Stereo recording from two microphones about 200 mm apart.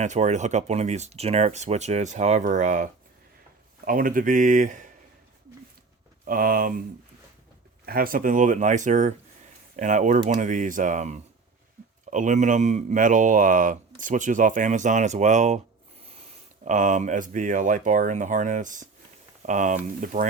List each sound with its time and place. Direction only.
0.0 s speech: 35° right (ahead or behind)
6.2 s speech: 45° right (ahead or behind)
7.9 s speech: 45° right (ahead or behind)
16.6 s speech: 40° right (ahead or behind)